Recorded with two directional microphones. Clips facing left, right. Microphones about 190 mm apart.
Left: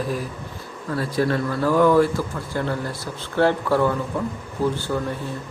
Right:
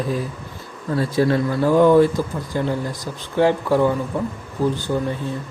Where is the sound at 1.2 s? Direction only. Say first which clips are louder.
Right 3 dB; 25° right (ahead or behind).